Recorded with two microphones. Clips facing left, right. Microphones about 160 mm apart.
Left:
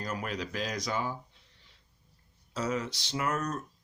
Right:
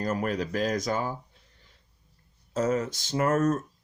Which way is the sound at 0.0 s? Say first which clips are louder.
Right 7 dB; 45° right (ahead or behind).